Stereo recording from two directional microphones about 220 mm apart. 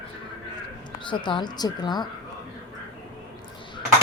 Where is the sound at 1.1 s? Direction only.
20° left (ahead or behind).